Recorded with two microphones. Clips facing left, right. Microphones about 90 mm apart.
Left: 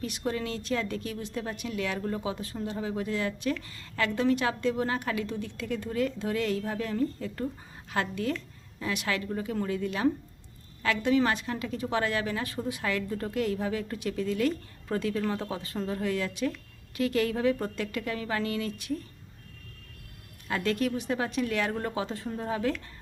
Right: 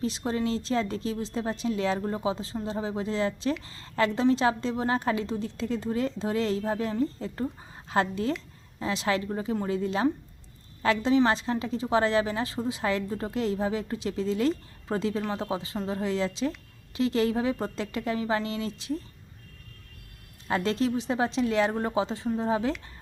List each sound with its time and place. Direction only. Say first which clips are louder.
0.0 s a woman's voice: right 3 dB; 30° right (ahead or behind)
20.5 s a woman's voice: right 2 dB; 30° right (ahead or behind)